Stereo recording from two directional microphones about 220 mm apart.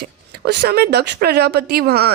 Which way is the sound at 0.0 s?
50° right (ahead or behind).